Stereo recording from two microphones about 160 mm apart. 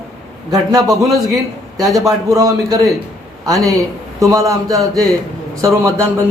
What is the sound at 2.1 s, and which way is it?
A man's voice, 20° right (ahead or behind).